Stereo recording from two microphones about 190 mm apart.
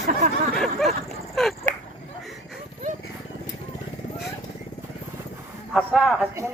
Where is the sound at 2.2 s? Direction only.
Centre (ahead or behind).